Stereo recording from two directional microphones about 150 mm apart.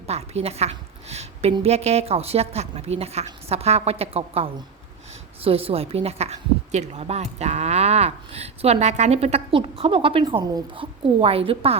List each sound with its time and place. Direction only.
0.1 s a woman's voice: 45° right (ahead or behind)